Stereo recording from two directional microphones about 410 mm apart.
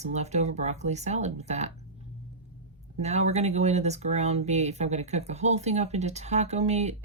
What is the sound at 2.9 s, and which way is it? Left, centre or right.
Speech, centre.